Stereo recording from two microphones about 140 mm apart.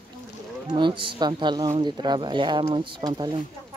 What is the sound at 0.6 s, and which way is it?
Speech, 35° right (ahead or behind).